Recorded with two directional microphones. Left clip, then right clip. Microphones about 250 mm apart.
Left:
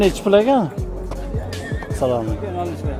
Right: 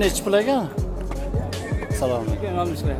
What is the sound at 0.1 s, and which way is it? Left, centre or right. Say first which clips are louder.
Speech: left 5 dB; left.